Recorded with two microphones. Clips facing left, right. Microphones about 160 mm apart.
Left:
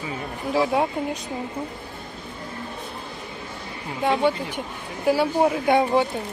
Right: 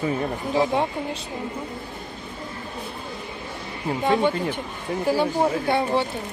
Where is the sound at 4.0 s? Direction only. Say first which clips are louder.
Even; centre (ahead or behind).